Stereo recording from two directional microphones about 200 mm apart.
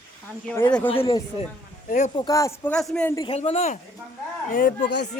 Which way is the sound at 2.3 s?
15° left (ahead or behind).